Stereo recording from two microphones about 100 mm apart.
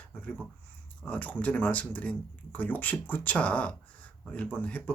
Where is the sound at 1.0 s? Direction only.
15° left (ahead or behind).